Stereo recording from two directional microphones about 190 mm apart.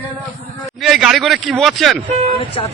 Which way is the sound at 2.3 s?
30° left (ahead or behind).